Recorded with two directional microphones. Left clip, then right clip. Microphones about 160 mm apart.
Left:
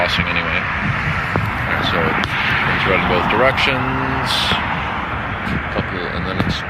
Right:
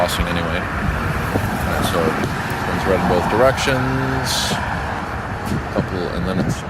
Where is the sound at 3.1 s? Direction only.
30° right (ahead or behind).